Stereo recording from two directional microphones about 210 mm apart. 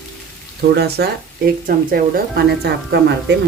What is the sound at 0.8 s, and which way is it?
Speech, 50° right (ahead or behind).